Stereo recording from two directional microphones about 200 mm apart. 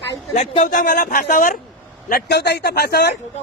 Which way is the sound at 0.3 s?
35° left (ahead or behind).